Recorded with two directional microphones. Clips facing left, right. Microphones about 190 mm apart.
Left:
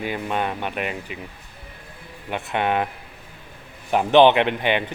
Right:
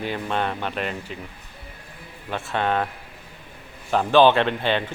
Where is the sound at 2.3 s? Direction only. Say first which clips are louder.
Left 1 dB; 15° left (ahead or behind).